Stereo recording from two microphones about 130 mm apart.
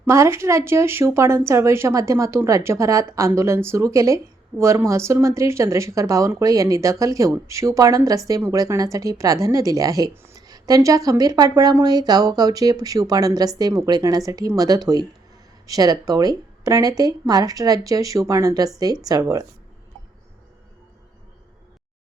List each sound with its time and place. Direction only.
0.0 s speech: 20° right (ahead or behind)